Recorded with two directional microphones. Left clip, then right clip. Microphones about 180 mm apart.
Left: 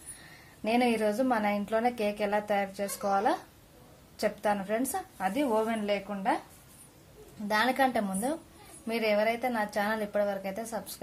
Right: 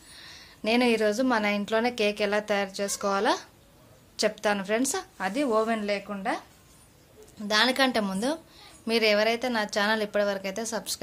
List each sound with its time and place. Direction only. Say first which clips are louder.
0.6 s a woman's voice: right 4 dB; 15° right (ahead or behind)
7.4 s a woman's voice: right 3 dB; 20° right (ahead or behind)